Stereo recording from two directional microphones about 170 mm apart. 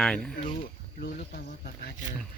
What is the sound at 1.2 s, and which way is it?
Speech, 60° left (ahead or behind).